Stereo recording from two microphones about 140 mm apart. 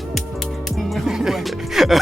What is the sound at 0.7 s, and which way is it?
Music, centre (ahead or behind).